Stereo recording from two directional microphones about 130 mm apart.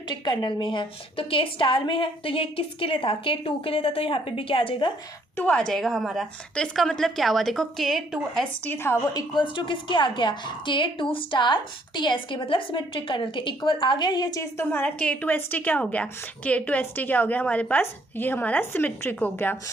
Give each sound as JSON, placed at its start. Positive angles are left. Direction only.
{"t": 0.1, "sound": "a woman's voice", "side_deg": 35}
{"t": 5.4, "sound": "a woman's voice", "side_deg": 10}
{"t": 8.6, "sound": "a woman's voice", "side_deg": 15}
{"t": 9.1, "sound": "a woman's voice", "side_deg": 35}
{"t": 14.6, "sound": "a woman's voice", "side_deg": 15}